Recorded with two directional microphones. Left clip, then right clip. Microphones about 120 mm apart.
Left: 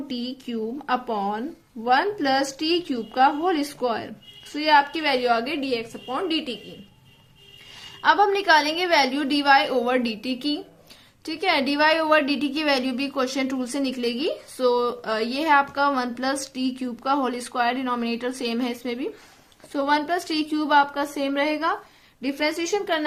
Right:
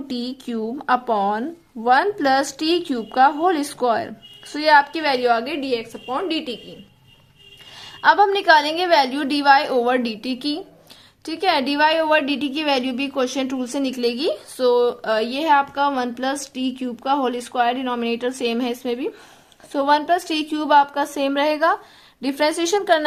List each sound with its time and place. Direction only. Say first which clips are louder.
0.1 s a woman's voice: right 5 dB; 45° right (ahead or behind); by 6.6 s 10° right (ahead or behind)
7.8 s a woman's voice: right 4 dB; 30° right (ahead or behind)